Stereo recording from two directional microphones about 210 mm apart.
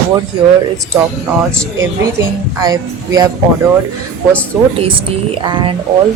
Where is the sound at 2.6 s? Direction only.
15° right (ahead or behind).